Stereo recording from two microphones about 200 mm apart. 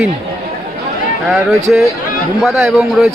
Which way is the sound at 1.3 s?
15° right (ahead or behind).